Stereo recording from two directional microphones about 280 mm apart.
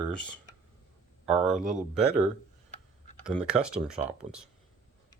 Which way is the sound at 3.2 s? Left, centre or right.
Centre.